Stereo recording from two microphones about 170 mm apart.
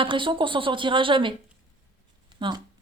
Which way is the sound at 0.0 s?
30° right (ahead or behind).